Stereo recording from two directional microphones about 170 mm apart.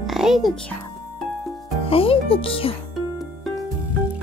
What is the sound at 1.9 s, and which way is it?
Speech, 35° left (ahead or behind).